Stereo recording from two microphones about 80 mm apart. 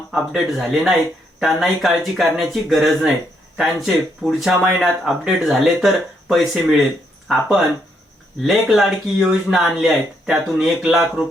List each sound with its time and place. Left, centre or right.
0.1 s speech: centre
8.4 s speech: centre